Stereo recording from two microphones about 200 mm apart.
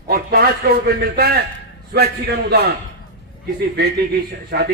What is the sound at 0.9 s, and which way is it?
Speech, 50° right (ahead or behind).